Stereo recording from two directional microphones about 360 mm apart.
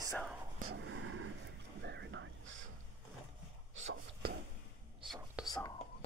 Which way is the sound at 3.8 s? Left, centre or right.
Right.